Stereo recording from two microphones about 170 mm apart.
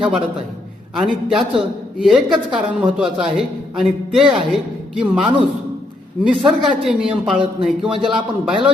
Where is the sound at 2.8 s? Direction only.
5° right (ahead or behind).